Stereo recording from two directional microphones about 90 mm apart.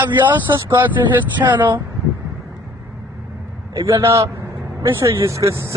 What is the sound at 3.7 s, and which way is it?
A man's voice, 35° right (ahead or behind).